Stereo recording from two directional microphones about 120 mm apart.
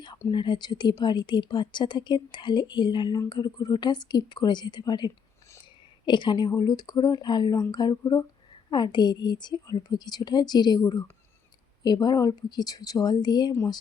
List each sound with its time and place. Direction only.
0.3 s a woman's voice: 40° left (ahead or behind)